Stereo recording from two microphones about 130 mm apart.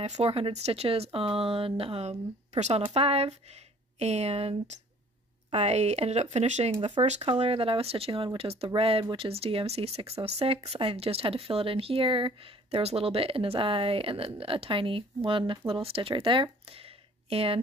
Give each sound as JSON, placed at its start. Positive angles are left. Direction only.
{"t": 0.0, "sound": "speech", "side_deg": -55}